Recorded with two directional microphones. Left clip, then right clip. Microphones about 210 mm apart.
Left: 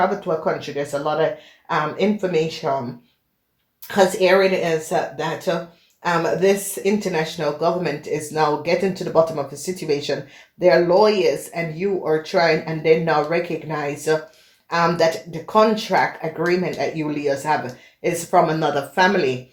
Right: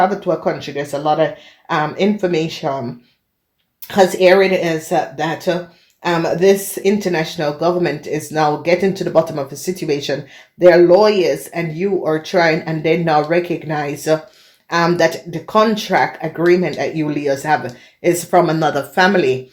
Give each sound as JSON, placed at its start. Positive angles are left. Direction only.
{"t": 0.0, "sound": "speech", "side_deg": -45}
{"t": 3.8, "sound": "speech", "side_deg": -45}